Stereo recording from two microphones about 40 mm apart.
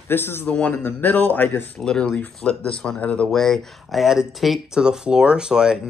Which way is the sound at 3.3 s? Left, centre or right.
Centre.